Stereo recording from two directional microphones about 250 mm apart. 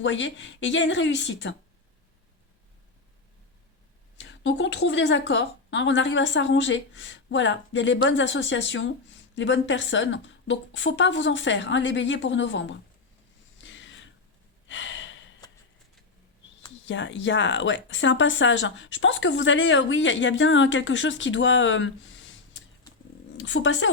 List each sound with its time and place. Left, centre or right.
0.0 s speech: left
4.2 s speech: left
13.6 s a sound: left
14.7 s gasp: left
16.8 s speech: left